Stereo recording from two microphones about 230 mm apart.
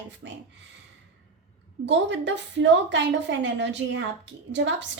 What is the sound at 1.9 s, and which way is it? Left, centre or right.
A woman's voice, right.